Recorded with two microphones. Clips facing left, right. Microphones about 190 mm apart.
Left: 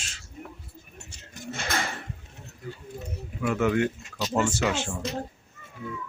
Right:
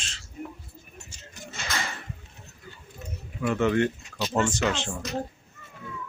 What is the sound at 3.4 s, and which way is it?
Speech, 5° left (ahead or behind).